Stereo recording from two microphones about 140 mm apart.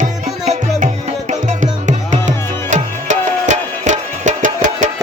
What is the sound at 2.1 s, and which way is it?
Music, 60° right (ahead or behind).